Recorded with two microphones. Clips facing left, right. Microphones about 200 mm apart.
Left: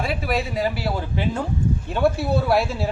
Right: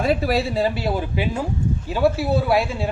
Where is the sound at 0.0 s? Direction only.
40° right (ahead or behind).